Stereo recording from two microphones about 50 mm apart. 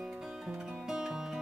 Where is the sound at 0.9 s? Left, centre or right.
Centre.